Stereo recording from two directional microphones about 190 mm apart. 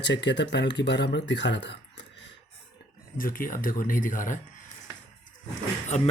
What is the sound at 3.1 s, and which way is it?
Speech, 50° left (ahead or behind).